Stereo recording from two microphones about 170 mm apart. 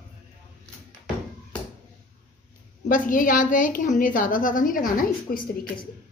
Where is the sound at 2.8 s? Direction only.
50° left (ahead or behind).